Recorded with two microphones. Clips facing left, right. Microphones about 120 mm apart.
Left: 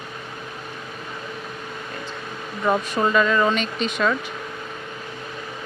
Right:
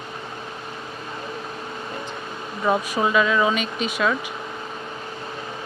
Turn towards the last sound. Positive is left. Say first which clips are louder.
# left 1 dB
turn(degrees=-5)  # may be behind; listen again after turning